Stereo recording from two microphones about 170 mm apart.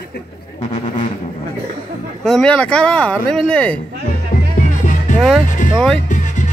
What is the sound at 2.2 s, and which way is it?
Speech, 5° left (ahead or behind).